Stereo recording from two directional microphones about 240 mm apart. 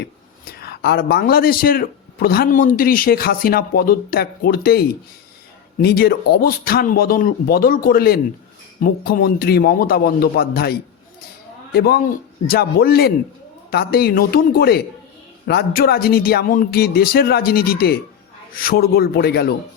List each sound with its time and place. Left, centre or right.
0.0 s speech: left